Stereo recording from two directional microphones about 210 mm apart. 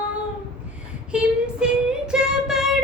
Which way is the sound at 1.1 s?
5° right (ahead or behind).